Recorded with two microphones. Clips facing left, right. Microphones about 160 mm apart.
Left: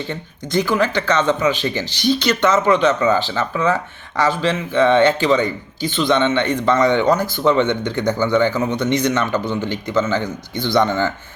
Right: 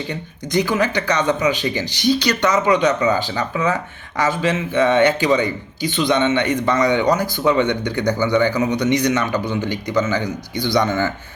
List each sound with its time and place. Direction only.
0.1 s speech: 15° right (ahead or behind)
2.1 s speech: 50° left (ahead or behind)
2.5 s speech: 15° right (ahead or behind)